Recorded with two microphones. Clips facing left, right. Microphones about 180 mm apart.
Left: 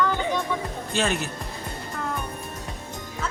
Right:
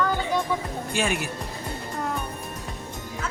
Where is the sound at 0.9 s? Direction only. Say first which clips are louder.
Left 1 dB; 10° right (ahead or behind).